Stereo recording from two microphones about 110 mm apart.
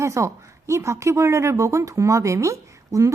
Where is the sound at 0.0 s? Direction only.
25° right (ahead or behind).